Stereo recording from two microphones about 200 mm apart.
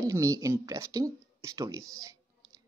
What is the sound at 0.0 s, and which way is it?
Speech, 15° right (ahead or behind).